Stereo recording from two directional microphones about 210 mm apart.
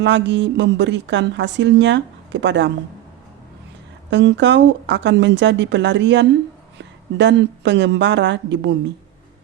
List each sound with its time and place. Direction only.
0.0 s a woman's voice: 55° right (ahead or behind)
4.1 s a woman's voice: 55° right (ahead or behind)